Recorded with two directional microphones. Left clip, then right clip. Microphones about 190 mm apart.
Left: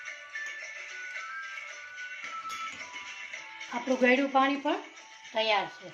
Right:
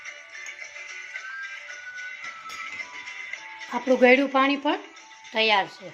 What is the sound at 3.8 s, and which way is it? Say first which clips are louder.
Speech: right 7 dB; 45° right (ahead or behind).